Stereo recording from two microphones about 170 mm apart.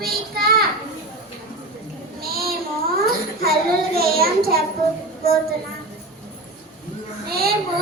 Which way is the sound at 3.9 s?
65° right (ahead or behind).